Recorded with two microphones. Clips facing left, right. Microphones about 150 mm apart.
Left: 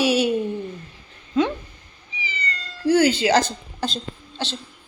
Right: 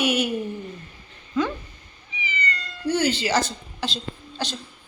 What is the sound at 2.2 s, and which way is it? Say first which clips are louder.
Cat: right 2 dB; 30° left (ahead or behind).